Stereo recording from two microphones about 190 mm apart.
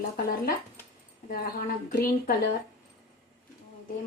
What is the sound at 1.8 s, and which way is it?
Speech, 50° left (ahead or behind).